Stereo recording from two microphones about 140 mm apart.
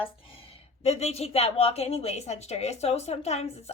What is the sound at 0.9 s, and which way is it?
A woman's voice, 50° left (ahead or behind).